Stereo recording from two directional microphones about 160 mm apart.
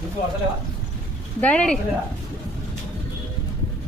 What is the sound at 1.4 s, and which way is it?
Speech, 5° left (ahead or behind).